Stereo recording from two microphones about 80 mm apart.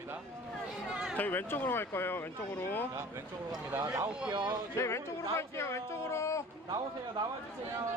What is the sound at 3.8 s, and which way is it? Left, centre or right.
Speech, right.